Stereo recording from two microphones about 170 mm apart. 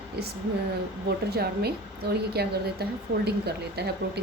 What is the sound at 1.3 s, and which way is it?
Speech, 70° right (ahead or behind).